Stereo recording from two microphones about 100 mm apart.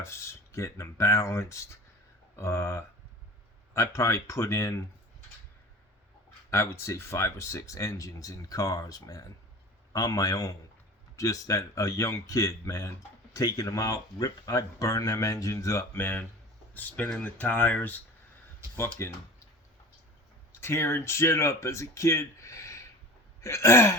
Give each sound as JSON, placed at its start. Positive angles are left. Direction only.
{"t": 0.0, "sound": "speech", "side_deg": 25}
{"t": 6.5, "sound": "speech", "side_deg": 25}
{"t": 18.8, "sound": "speech", "side_deg": 25}
{"t": 20.6, "sound": "speech", "side_deg": 25}